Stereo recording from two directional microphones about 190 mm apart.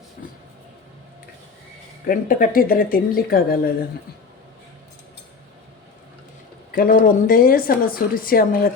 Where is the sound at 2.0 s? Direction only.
45° left (ahead or behind).